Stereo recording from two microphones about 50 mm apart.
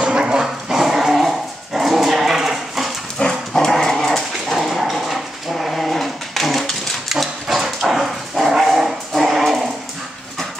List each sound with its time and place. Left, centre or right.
0.0 s dog: centre
3.2 s dog: centre